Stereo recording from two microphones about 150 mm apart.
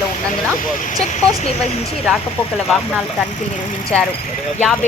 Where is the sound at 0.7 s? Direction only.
60° left (ahead or behind).